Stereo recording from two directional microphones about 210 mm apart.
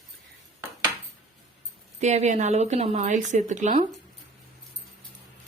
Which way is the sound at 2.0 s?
35° right (ahead or behind).